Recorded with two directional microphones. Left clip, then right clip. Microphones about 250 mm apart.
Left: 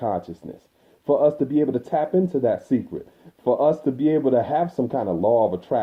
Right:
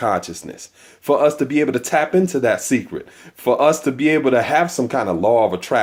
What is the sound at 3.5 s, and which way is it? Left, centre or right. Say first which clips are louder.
Speech: right 4 dB; right.